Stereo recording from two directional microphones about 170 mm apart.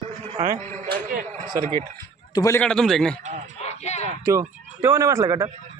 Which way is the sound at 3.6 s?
40° left (ahead or behind).